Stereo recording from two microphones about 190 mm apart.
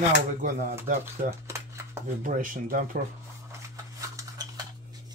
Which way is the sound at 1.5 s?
15° right (ahead or behind).